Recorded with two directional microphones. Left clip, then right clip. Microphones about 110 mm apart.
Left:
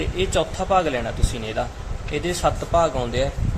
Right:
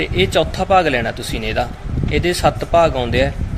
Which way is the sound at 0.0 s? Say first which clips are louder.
Right 6 dB; 45° right (ahead or behind).